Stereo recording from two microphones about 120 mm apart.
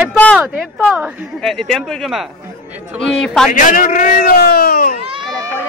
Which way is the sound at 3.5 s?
90° left.